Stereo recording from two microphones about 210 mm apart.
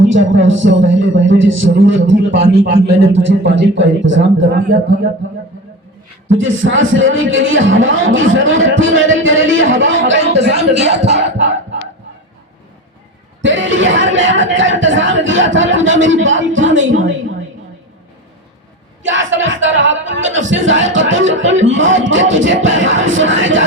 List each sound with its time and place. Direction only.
0.0 s speech: 60° right (ahead or behind)
6.4 s speech: 65° right (ahead or behind)
11.0 s cough: 55° right (ahead or behind)
13.4 s speech: 65° right (ahead or behind)
19.0 s speech: 65° right (ahead or behind)